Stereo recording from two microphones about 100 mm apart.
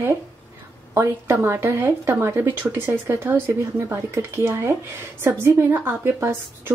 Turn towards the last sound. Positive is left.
turn(degrees=-25)  # may be behind; listen again after turning